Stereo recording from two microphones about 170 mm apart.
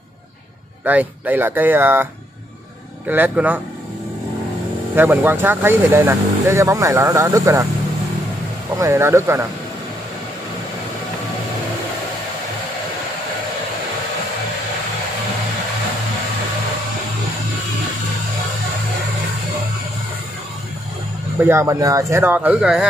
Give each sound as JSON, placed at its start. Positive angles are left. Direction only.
{"t": 0.8, "sound": "speech", "side_deg": -10}
{"t": 3.1, "sound": "speech", "side_deg": -10}
{"t": 4.9, "sound": "speech", "side_deg": -10}
{"t": 8.7, "sound": "speech", "side_deg": -15}
{"t": 21.4, "sound": "speech", "side_deg": -15}